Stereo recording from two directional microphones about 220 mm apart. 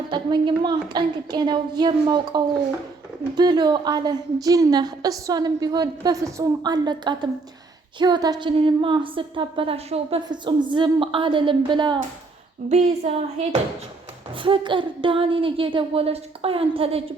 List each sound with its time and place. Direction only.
0.1 s a woman's voice: 20° right (ahead or behind)